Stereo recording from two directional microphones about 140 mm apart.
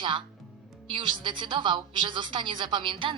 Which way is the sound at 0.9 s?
35° right (ahead or behind).